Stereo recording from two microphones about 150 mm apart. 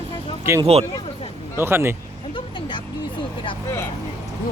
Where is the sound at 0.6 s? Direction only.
45° right (ahead or behind).